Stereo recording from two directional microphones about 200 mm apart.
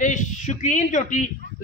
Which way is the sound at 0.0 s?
40° left (ahead or behind).